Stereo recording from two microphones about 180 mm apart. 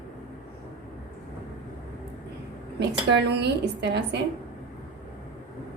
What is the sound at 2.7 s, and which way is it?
A woman's voice, 70° right (ahead or behind).